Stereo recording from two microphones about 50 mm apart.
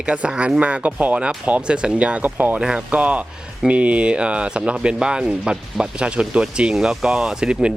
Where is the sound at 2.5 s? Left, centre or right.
Centre.